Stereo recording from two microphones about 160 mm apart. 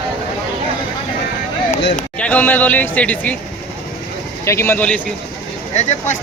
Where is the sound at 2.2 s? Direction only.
10° left (ahead or behind).